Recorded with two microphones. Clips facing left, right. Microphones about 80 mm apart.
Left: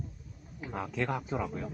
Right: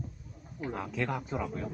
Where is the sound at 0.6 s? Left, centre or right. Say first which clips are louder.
Even; centre.